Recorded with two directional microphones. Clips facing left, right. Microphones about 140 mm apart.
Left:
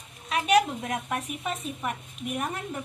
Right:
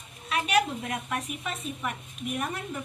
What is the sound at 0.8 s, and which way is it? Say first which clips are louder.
A woman's voice: left 2 dB; 35° left (ahead or behind).